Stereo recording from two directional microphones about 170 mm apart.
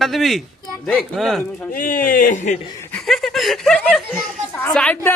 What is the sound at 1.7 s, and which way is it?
Speech, 55° left (ahead or behind).